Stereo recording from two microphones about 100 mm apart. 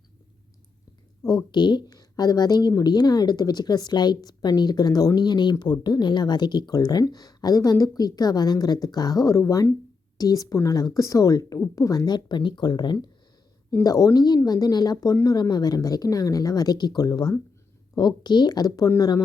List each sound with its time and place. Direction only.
1.2 s a woman's voice: 45° left (ahead or behind)
13.8 s a woman's voice: 35° left (ahead or behind)